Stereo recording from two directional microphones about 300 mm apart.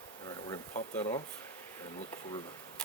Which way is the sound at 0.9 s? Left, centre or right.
Centre.